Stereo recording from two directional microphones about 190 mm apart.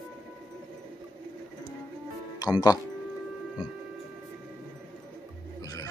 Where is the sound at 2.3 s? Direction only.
20° left (ahead or behind).